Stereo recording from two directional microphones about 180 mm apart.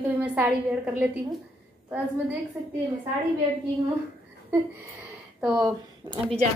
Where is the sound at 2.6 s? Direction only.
10° right (ahead or behind).